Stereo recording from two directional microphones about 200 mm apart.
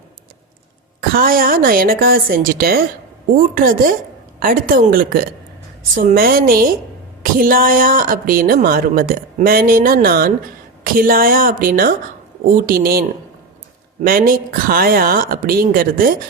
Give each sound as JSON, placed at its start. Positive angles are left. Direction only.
{"t": 1.1, "sound": "speech", "side_deg": -45}